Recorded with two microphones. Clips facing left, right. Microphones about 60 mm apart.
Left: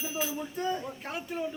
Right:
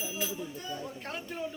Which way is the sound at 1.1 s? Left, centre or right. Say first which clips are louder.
Left 5 dB; centre.